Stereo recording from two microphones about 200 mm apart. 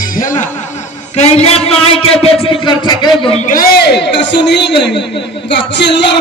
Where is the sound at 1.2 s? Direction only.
30° left (ahead or behind).